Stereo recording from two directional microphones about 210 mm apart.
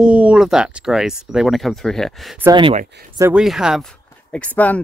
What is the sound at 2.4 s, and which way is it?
Speech, 20° right (ahead or behind).